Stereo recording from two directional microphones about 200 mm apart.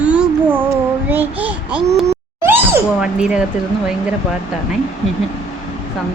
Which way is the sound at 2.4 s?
10° right (ahead or behind).